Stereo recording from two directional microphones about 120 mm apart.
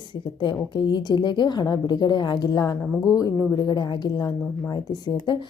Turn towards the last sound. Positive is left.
turn(degrees=40)  # may be behind; listen again after turning